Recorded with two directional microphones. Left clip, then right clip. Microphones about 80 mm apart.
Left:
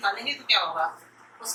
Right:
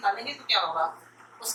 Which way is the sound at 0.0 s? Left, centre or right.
Centre.